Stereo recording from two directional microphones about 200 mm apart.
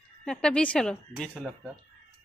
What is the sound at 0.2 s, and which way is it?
Speech, 5° left (ahead or behind).